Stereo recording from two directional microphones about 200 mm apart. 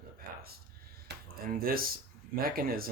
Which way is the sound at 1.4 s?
45° right (ahead or behind).